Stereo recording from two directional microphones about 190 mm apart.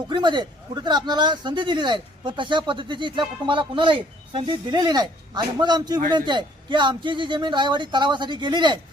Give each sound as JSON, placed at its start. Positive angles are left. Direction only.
{"t": 0.1, "sound": "a man's voice", "side_deg": -25}